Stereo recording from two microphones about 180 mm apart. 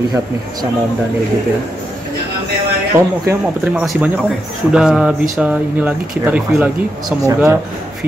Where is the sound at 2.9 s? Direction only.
10° right (ahead or behind).